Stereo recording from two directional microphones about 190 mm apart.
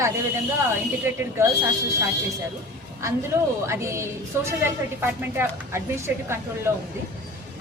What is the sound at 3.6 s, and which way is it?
A woman's voice, 15° right (ahead or behind).